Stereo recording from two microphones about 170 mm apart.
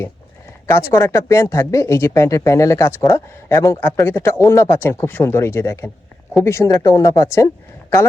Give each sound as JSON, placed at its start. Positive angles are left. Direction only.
{"t": 0.7, "sound": "speech", "side_deg": 15}